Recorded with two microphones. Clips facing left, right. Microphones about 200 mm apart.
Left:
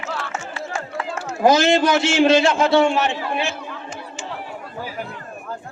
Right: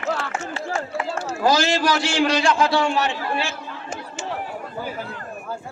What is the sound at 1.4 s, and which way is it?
A man's voice, 20° left (ahead or behind).